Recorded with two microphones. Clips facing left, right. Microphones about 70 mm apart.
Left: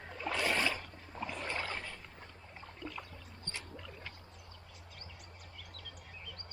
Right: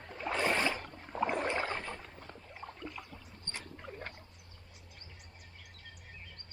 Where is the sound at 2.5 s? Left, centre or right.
Centre.